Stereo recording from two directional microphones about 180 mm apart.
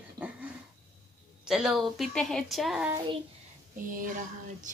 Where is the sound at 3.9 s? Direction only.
45° right (ahead or behind).